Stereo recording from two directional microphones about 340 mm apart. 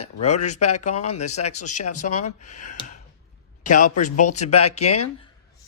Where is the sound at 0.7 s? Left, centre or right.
Left.